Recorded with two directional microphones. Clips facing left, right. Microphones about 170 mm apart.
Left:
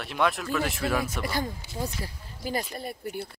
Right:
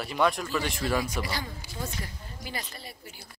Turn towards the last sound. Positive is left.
turn(degrees=55)  # may be behind; listen again after turning